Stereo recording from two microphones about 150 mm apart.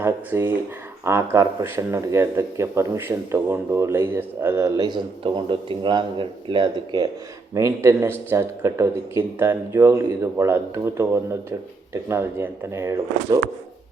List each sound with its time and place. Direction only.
0.0 s a man's voice: 15° right (ahead or behind); by 7.1 s 30° right (ahead or behind)
7.5 s speech: 20° right (ahead or behind)